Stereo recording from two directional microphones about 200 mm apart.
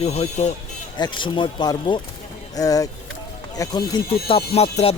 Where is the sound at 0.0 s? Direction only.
30° left (ahead or behind).